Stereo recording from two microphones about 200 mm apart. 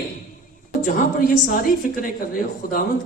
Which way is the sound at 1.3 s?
45° left (ahead or behind).